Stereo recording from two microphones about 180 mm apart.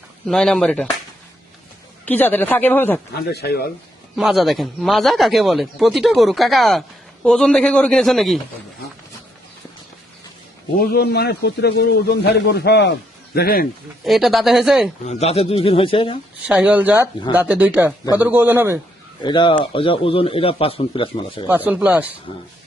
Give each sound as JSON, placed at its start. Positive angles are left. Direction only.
{"t": 0.3, "sound": "a man's voice", "side_deg": 5}
{"t": 2.0, "sound": "speech", "side_deg": 10}
{"t": 3.2, "sound": "a man's voice", "side_deg": 60}
{"t": 4.1, "sound": "a man's voice", "side_deg": 0}
{"t": 10.9, "sound": "a man's voice", "side_deg": 60}
{"t": 14.0, "sound": "a man's voice", "side_deg": 0}
{"t": 15.0, "sound": "a man's voice", "side_deg": 35}
{"t": 16.5, "sound": "speech", "side_deg": -5}
{"t": 19.2, "sound": "speech", "side_deg": 25}
{"t": 21.4, "sound": "speech", "side_deg": -10}